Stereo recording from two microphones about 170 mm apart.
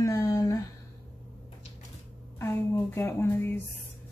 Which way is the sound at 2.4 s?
15° left (ahead or behind).